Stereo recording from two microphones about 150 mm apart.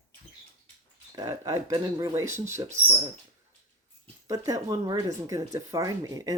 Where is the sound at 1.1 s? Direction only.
25° right (ahead or behind).